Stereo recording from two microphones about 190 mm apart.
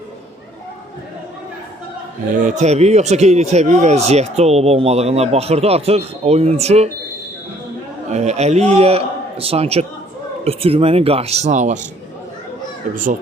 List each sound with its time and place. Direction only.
2.3 s speech: 40° right (ahead or behind)
8.1 s speech: 35° right (ahead or behind)